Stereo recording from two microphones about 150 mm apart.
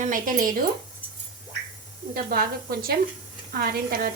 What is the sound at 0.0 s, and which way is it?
Speech, 65° right (ahead or behind).